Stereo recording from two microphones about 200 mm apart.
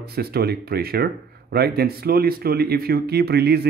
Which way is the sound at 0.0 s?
50° right (ahead or behind).